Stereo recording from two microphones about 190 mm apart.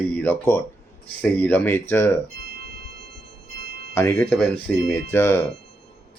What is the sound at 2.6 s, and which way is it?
Music, 55° right (ahead or behind).